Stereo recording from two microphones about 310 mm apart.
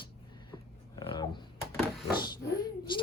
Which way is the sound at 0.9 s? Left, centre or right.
Centre.